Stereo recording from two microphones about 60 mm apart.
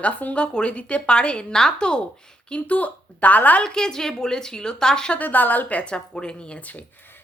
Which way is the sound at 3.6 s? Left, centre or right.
Centre.